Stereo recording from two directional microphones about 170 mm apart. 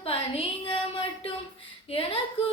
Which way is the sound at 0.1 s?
30° left (ahead or behind).